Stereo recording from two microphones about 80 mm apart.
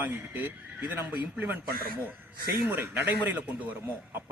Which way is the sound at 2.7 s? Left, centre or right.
Right.